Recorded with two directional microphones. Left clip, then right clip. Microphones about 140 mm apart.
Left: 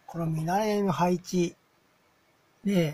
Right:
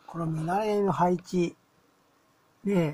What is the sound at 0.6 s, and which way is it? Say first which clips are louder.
Speech: right 1 dB; 10° right (ahead or behind).